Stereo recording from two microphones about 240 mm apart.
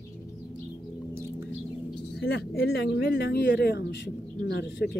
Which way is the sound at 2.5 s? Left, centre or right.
Left.